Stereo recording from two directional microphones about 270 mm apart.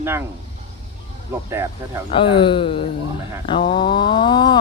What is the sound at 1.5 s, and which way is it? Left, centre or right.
Speech, centre.